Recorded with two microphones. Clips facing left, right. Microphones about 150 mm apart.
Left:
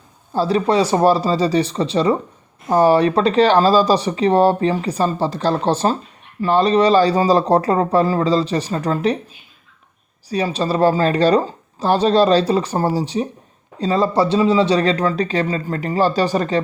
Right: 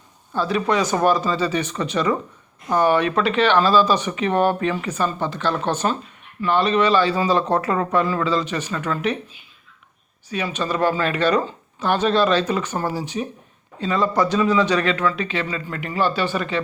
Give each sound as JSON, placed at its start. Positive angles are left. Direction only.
{"t": 0.3, "sound": "speech", "side_deg": 35}
{"t": 10.2, "sound": "speech", "side_deg": 35}